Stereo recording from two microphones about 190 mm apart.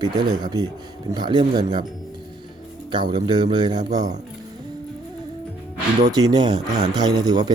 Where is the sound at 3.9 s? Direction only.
40° right (ahead or behind).